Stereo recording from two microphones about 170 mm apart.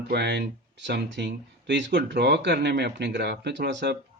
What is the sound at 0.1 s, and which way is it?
Speech, 90° right.